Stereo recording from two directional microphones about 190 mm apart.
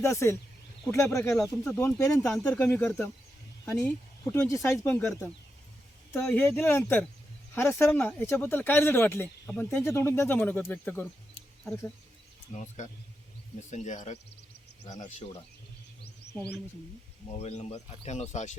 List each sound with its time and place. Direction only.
0.0 s speech: 15° left (ahead or behind)
2.2 s speech: 5° left (ahead or behind)
12.5 s speech: 40° left (ahead or behind)
17.4 s speech: 35° left (ahead or behind)